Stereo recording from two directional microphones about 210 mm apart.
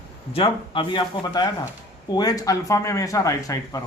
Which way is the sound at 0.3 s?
25° left (ahead or behind).